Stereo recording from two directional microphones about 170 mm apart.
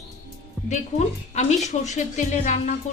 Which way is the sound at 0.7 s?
45° left (ahead or behind).